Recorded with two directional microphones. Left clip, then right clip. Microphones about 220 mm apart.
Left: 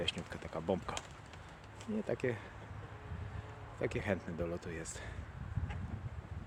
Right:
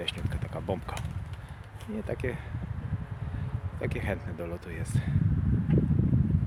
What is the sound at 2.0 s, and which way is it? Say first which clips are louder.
Fowl: right 3 dB; centre (ahead or behind).